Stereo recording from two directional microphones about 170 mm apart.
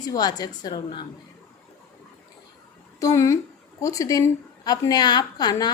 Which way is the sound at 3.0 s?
20° left (ahead or behind).